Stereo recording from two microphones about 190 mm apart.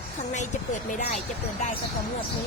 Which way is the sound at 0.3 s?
40° left (ahead or behind).